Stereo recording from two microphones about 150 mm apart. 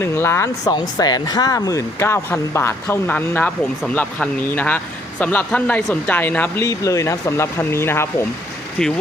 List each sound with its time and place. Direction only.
0.0 s speech: 15° left (ahead or behind)